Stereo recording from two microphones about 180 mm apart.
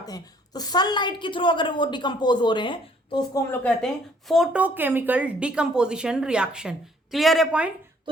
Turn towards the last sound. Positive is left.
turn(degrees=-5)  # may be behind; listen again after turning